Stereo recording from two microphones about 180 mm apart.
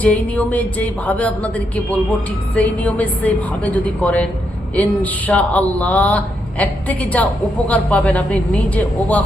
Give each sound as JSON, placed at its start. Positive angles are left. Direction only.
{"t": 0.0, "sound": "speech", "side_deg": 10}